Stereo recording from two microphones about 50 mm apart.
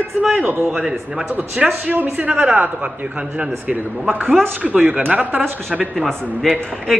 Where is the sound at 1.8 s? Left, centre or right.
Right.